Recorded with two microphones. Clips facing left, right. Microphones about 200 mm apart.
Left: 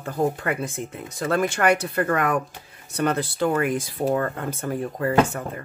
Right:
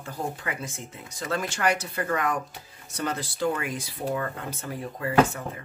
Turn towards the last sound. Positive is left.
turn(degrees=50)  # may be behind; listen again after turning